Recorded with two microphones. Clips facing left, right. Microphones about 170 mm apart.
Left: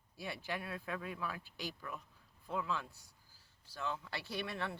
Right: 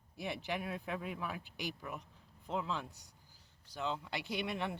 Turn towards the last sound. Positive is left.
turn(degrees=-20)  # may be behind; listen again after turning